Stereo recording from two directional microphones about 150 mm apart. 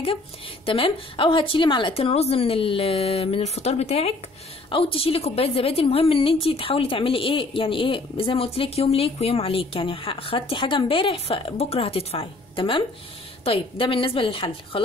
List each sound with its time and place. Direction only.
0.7 s a woman's voice: 35° left (ahead or behind)